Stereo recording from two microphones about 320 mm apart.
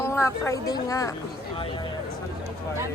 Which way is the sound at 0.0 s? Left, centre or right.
Centre.